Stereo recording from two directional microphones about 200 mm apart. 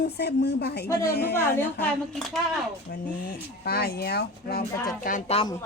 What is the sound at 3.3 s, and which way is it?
Speech, 50° left (ahead or behind).